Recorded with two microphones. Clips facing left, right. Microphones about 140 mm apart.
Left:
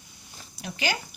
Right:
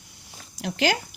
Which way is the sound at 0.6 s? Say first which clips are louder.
Right 6 dB; 80° right.